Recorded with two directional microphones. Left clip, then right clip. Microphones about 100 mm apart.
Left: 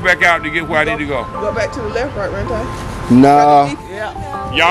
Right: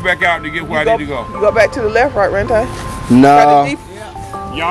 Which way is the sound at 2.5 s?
20° right (ahead or behind).